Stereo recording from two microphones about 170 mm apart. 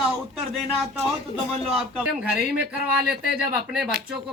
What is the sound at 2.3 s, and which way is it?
Speech, 65° right (ahead or behind).